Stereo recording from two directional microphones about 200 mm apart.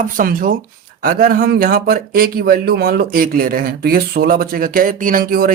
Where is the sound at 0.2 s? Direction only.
45° right (ahead or behind).